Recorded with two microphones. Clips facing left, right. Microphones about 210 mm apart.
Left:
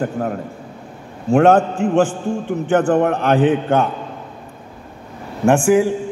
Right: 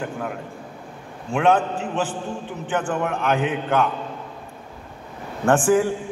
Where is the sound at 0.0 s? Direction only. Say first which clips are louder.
Left 7 dB; 40° left (ahead or behind).